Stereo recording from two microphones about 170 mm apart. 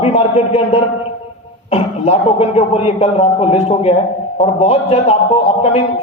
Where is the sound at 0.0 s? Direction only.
40° left (ahead or behind).